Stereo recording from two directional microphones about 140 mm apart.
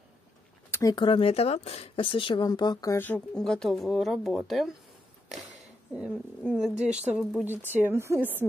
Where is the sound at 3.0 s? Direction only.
10° left (ahead or behind).